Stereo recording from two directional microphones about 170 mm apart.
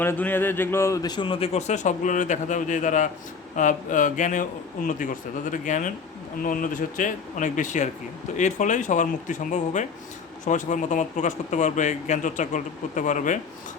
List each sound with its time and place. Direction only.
0.0 s a man's voice: 10° left (ahead or behind); by 13.4 s 45° left (ahead or behind)